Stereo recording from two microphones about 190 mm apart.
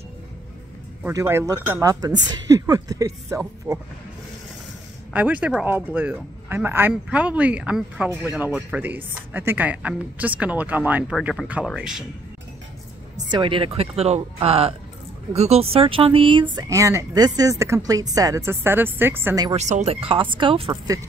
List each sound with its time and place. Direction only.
1.0 s speech: 15° right (ahead or behind)
5.1 s speech: 5° right (ahead or behind)
13.3 s speech: 25° right (ahead or behind)
19.5 s speech: 35° right (ahead or behind)
20.7 s speech: 20° right (ahead or behind)